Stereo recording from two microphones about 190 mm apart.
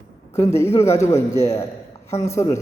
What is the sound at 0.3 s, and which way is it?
A man's voice, 15° left (ahead or behind).